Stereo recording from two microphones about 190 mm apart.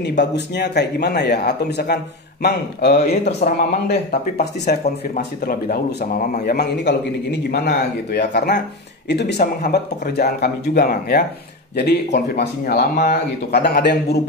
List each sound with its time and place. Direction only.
0.2 s speech: 65° left (ahead or behind)